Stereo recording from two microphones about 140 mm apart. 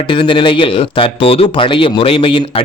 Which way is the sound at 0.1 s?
35° left (ahead or behind).